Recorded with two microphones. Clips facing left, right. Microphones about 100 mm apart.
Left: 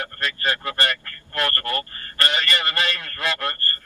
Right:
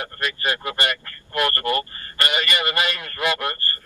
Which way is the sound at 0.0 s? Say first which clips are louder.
Even; 15° right (ahead or behind).